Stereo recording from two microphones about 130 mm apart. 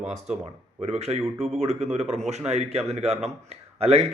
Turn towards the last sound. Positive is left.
turn(degrees=-55)  # may be behind; listen again after turning